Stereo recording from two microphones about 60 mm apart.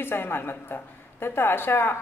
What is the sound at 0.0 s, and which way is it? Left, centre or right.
A woman's voice, left.